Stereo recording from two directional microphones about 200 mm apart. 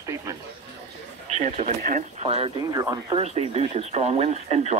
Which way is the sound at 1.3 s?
35° right (ahead or behind).